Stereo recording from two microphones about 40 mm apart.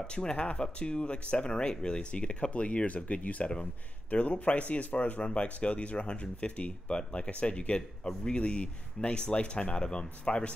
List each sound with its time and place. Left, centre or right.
0.0 s speech: left